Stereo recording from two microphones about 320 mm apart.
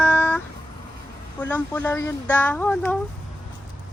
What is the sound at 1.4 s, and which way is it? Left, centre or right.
Speech, centre.